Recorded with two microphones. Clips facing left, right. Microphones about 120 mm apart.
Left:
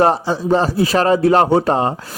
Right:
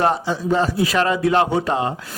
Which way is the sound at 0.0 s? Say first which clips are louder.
Left 4 dB; 35° left (ahead or behind).